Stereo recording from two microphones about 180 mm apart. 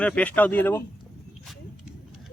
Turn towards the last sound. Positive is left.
turn(degrees=10)  # may be behind; listen again after turning